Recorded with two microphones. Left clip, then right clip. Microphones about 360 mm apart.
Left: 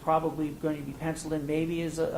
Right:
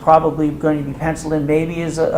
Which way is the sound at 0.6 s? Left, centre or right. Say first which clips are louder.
Right 14 dB; centre.